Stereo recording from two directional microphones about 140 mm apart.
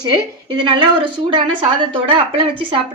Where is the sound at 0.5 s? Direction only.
35° right (ahead or behind).